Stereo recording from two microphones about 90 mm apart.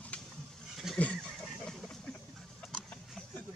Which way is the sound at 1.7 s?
10° left (ahead or behind).